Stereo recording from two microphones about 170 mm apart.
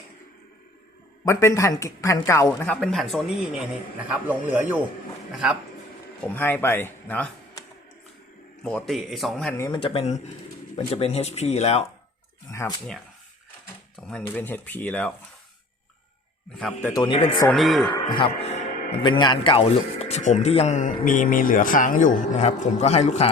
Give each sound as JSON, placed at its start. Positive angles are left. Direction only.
{"t": 1.2, "sound": "a woman's voice", "side_deg": 15}
{"t": 2.5, "sound": "a man's voice", "side_deg": 5}
{"t": 6.2, "sound": "a woman's voice", "side_deg": 10}
{"t": 8.6, "sound": "a man's voice", "side_deg": 5}
{"t": 9.7, "sound": "speech", "side_deg": 30}
{"t": 12.5, "sound": "a sound", "side_deg": 15}
{"t": 13.9, "sound": "a woman's voice", "side_deg": 5}
{"t": 16.6, "sound": "a man's voice", "side_deg": 5}
{"t": 16.9, "sound": "speech", "side_deg": 30}
{"t": 17.5, "sound": "a man's voice", "side_deg": 0}
{"t": 18.1, "sound": "speech", "side_deg": 35}
{"t": 19.0, "sound": "a man's voice", "side_deg": 25}